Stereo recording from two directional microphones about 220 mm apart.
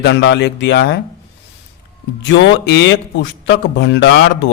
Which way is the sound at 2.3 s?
55° left (ahead or behind).